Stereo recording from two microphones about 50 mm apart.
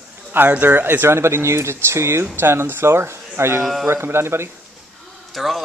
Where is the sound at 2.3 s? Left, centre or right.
Right.